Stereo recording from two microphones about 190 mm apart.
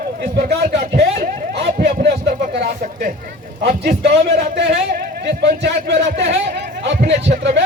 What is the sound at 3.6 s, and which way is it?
Speech, 60° right (ahead or behind).